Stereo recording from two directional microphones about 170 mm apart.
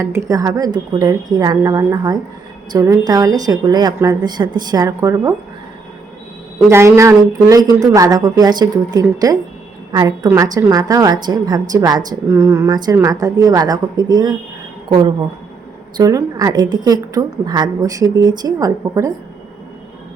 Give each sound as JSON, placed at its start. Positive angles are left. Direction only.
{"t": 0.0, "sound": "a woman's voice", "side_deg": -15}
{"t": 6.7, "sound": "a woman's voice", "side_deg": -15}